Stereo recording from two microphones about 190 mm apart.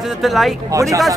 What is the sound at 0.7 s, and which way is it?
Speech, 15° right (ahead or behind).